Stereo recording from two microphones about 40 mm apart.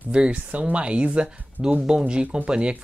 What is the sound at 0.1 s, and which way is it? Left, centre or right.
Speech, right.